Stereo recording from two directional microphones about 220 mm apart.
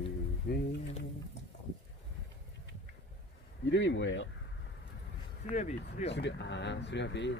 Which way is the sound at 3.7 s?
55° left (ahead or behind).